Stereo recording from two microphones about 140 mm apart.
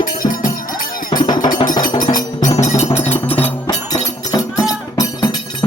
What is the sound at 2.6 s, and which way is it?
Music, 60° left (ahead or behind).